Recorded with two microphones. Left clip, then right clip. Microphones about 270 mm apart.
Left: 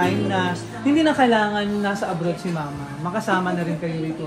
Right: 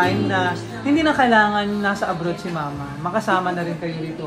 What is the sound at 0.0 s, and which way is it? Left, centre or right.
Music, right.